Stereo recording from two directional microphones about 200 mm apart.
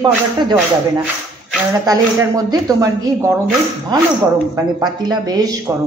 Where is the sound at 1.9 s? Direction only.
20° right (ahead or behind).